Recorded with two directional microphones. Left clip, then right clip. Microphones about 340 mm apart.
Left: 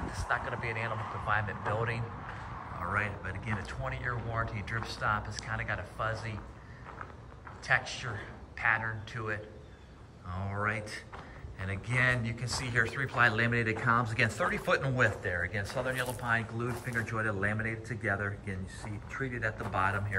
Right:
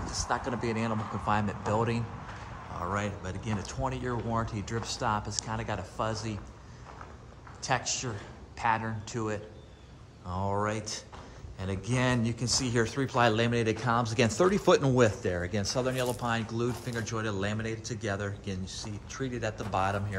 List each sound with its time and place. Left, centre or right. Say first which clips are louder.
0.7 s speech: right 2 dB; centre
7.6 s speech: even; centre